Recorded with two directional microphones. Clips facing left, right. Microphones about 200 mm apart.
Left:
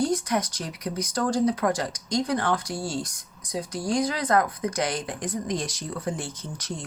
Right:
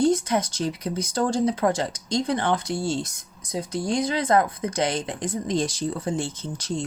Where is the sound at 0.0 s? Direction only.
25° right (ahead or behind).